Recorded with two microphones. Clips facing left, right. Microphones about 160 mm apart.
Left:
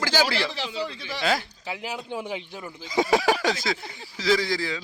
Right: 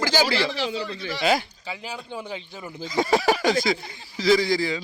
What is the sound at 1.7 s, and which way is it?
Speech, 10° left (ahead or behind).